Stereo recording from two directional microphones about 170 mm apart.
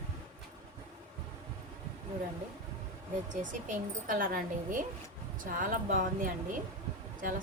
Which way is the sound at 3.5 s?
50° right (ahead or behind).